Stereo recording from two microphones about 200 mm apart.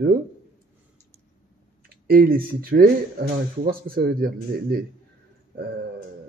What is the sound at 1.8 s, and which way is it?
Speech, 45° right (ahead or behind).